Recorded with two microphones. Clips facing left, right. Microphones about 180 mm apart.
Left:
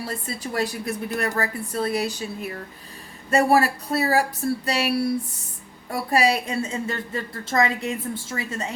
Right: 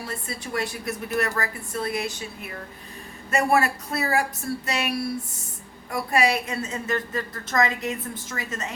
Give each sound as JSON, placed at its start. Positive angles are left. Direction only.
{"t": 0.1, "sound": "a woman's voice", "side_deg": 35}
{"t": 3.2, "sound": "a woman's voice", "side_deg": 35}